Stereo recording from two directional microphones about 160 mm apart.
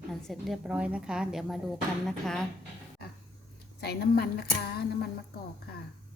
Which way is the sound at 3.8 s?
80° left.